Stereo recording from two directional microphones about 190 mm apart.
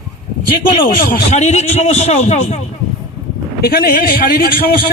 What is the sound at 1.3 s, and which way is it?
A man's voice, 35° left (ahead or behind).